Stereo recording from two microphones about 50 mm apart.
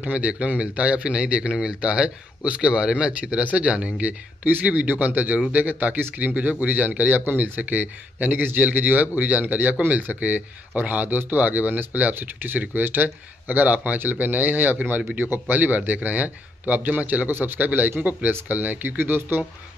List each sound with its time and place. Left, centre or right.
0.0 s a man's voice: right
4.6 s speech: right
17.3 s a man's voice: right
17.6 s speech: right